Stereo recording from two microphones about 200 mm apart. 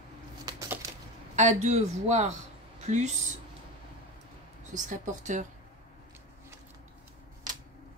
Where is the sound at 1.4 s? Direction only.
35° right (ahead or behind).